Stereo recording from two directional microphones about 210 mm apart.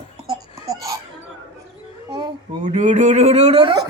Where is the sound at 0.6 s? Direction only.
15° right (ahead or behind).